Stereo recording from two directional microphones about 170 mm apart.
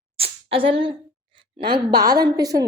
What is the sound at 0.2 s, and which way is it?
A woman's voice, 30° right (ahead or behind).